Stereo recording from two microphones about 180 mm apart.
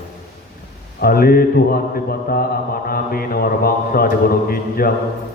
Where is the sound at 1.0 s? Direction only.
55° left (ahead or behind).